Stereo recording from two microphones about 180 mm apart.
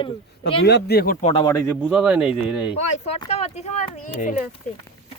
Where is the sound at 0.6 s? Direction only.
65° left (ahead or behind).